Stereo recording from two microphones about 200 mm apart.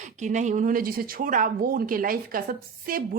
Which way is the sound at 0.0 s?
35° right (ahead or behind).